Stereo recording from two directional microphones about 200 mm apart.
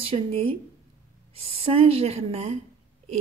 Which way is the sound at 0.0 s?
30° right (ahead or behind).